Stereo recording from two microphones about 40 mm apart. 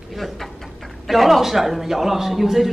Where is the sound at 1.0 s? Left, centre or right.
Centre.